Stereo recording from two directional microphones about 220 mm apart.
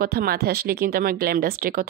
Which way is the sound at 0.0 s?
45° right (ahead or behind).